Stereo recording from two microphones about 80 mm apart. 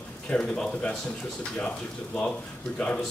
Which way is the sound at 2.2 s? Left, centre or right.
Centre.